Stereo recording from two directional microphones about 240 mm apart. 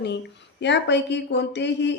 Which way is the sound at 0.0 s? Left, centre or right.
Left.